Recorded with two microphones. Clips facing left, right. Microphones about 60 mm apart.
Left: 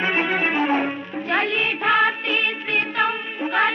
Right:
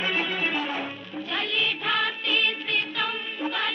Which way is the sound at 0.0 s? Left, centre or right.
Left.